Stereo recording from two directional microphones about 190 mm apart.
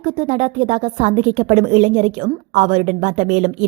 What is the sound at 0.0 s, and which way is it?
A woman's voice, 35° right (ahead or behind).